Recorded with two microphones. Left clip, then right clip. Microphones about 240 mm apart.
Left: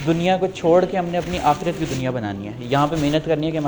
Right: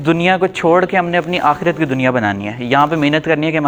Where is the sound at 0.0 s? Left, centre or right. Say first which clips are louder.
Right 6 dB; right.